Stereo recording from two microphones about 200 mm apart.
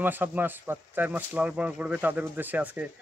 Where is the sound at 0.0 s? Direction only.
10° right (ahead or behind).